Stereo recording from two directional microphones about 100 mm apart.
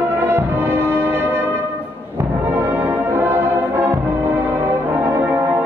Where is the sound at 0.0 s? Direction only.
25° right (ahead or behind).